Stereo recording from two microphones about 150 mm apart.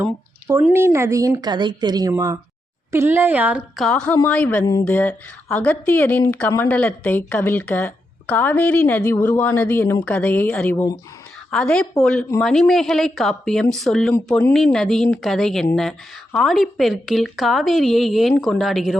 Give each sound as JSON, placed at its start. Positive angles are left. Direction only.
{"t": 0.0, "sound": "a sound", "side_deg": -15}
{"t": 0.7, "sound": "a woman's voice", "side_deg": -15}
{"t": 3.8, "sound": "a woman's voice", "side_deg": 5}
{"t": 4.6, "sound": "speech", "side_deg": 25}
{"t": 4.9, "sound": "a woman's voice", "side_deg": 10}